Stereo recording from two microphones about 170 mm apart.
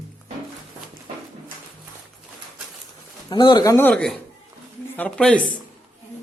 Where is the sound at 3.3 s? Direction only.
25° left (ahead or behind).